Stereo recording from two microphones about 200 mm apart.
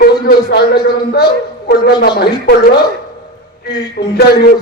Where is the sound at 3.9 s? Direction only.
50° left (ahead or behind).